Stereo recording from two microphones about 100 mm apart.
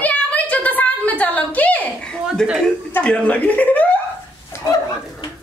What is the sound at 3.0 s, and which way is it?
Speech, 15° left (ahead or behind).